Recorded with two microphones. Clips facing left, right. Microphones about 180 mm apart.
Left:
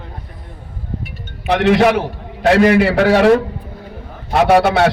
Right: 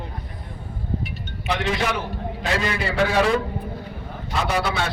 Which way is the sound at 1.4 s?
70° left (ahead or behind).